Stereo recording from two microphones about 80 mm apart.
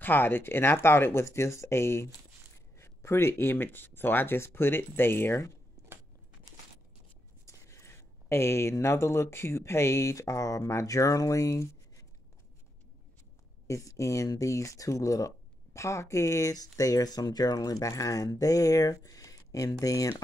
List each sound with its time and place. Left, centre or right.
0.0 s speech: left
7.4 s speech: left
13.7 s speech: left